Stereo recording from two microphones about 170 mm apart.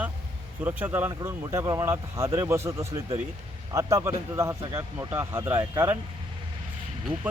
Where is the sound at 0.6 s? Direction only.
10° right (ahead or behind).